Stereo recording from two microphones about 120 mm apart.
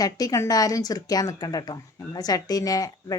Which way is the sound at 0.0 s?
30° left (ahead or behind).